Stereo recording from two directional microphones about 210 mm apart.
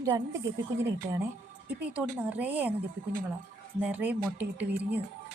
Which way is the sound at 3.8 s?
10° right (ahead or behind).